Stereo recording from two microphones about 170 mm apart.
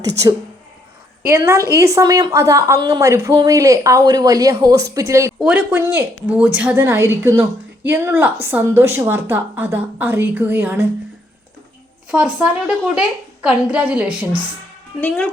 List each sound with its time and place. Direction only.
1.2 s a woman's voice: 15° right (ahead or behind)
12.1 s a woman's voice: 5° right (ahead or behind)
15.0 s a woman's voice: 5° left (ahead or behind)